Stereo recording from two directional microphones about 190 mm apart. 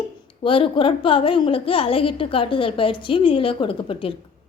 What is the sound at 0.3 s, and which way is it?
A woman's voice, 25° left (ahead or behind).